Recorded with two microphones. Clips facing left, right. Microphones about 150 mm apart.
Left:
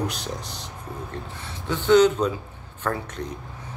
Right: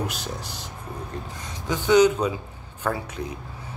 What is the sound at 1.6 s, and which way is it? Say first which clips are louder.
Speech: left 1 dB; 10° right (ahead or behind).